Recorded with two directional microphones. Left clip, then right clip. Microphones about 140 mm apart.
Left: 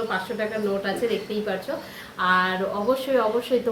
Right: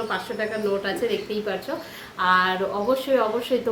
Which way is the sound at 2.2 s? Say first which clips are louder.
Right 1 dB; 10° right (ahead or behind).